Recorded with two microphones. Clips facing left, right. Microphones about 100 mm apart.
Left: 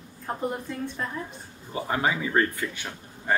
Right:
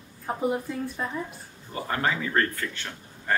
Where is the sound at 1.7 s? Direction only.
15° left (ahead or behind).